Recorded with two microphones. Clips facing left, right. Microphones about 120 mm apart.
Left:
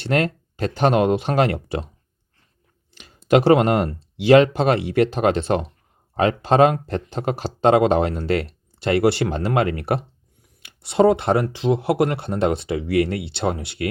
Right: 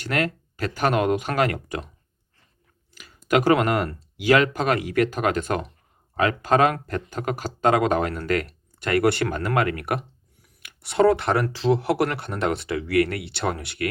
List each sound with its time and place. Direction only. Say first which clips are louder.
0.0 s speech: left 4 dB; 30° left (ahead or behind)
3.2 s speech: left 4 dB; 30° left (ahead or behind)